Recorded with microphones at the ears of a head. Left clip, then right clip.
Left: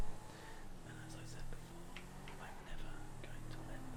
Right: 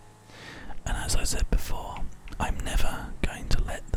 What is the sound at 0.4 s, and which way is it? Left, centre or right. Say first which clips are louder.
Whispering: right 16 dB; right.